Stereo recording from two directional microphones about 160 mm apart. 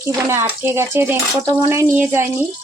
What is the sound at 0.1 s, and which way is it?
Speech, 15° right (ahead or behind).